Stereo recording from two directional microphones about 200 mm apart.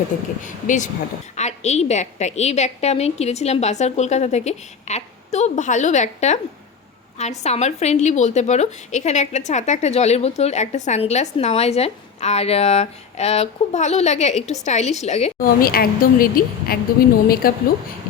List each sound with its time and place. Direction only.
0.4 s a woman's voice: 40° left (ahead or behind)